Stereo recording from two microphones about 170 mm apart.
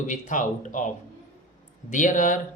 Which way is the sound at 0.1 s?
50° left (ahead or behind).